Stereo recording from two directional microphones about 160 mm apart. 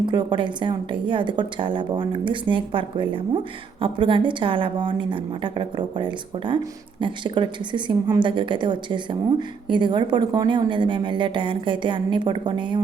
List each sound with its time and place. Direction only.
0.0 s a woman's voice: 30° right (ahead or behind)